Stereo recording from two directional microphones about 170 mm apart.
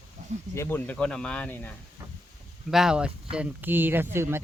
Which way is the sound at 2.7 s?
5° right (ahead or behind).